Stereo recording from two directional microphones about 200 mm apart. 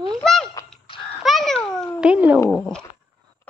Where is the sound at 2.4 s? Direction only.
5° left (ahead or behind).